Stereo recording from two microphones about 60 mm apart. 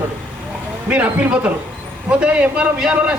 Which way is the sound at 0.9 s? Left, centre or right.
Right.